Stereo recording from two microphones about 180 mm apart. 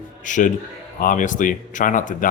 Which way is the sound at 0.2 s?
45° left (ahead or behind).